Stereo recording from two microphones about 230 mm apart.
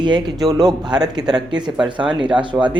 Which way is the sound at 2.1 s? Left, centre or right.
Centre.